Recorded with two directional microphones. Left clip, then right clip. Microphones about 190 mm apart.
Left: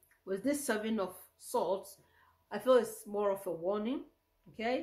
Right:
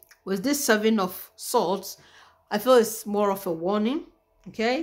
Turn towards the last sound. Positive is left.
turn(degrees=-50)  # may be behind; listen again after turning